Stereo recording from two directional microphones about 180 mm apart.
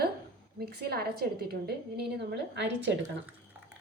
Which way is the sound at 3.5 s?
10° right (ahead or behind).